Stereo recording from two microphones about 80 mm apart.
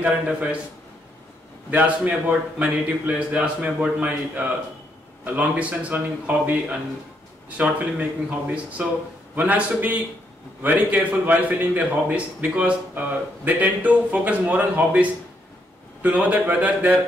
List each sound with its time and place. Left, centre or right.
0.0 s a man's voice: centre
1.7 s a man's voice: centre